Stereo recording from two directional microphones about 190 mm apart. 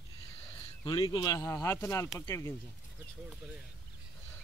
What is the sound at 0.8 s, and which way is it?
Speech, 25° left (ahead or behind).